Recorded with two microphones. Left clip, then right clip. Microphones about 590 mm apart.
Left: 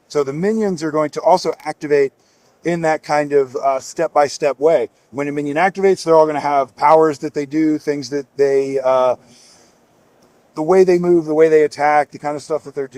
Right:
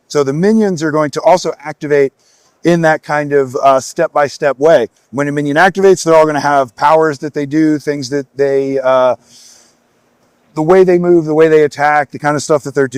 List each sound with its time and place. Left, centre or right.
0.1 s speech: right
10.5 s speech: right
12.3 s speech: right